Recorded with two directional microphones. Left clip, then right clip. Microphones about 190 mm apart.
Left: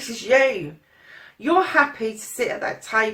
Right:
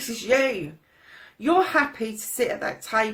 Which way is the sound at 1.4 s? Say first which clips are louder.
Left 3 dB; 40° right (ahead or behind).